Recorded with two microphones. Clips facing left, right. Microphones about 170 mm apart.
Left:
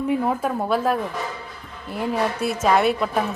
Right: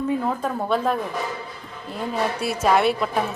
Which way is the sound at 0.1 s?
10° left (ahead or behind).